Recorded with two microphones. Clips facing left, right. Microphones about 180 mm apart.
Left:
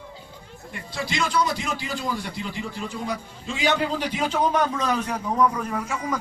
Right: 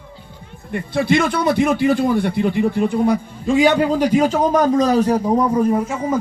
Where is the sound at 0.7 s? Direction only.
60° right (ahead or behind).